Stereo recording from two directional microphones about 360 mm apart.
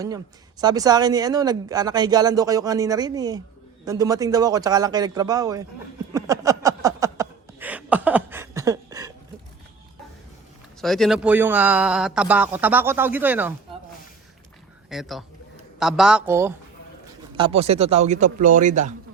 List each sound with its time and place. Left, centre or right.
0.6 s speech: centre
6.1 s a sound: centre
10.8 s a man's voice: centre
14.8 s a man's voice: centre; by 18.9 s right